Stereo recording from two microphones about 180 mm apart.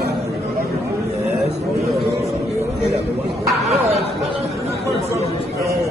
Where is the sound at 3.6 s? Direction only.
35° right (ahead or behind).